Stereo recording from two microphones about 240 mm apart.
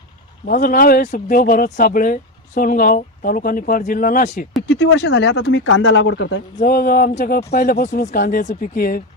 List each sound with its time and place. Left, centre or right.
0.4 s speech: left
4.7 s speech: left
6.6 s speech: left